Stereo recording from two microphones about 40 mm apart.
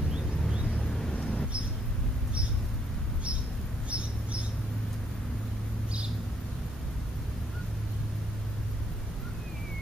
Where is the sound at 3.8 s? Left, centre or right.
Right.